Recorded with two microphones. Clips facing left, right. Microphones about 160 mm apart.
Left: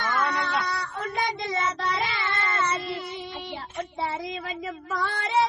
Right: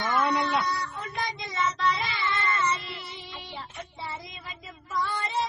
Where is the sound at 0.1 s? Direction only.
20° right (ahead or behind).